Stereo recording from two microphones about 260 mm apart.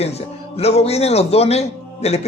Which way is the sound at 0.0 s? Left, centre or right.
Left.